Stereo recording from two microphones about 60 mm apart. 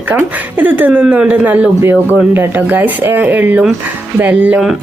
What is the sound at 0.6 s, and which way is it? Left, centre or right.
Speech, right.